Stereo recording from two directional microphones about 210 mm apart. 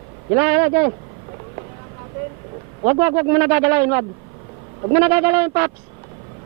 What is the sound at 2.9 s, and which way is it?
Speech, 15° right (ahead or behind).